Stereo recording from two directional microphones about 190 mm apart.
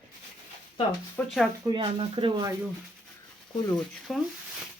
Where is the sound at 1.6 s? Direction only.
20° right (ahead or behind).